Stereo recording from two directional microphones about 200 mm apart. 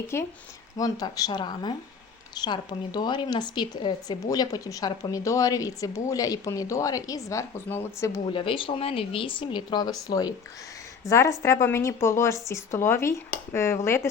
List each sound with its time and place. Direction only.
0.1 s a woman's voice: 10° left (ahead or behind)
8.3 s a woman's voice: 25° left (ahead or behind)